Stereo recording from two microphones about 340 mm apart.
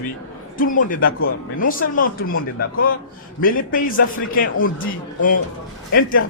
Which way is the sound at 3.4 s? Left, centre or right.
Left.